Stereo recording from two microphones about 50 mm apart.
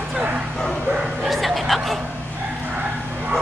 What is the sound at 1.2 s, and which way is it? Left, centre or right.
Bow-wow, centre.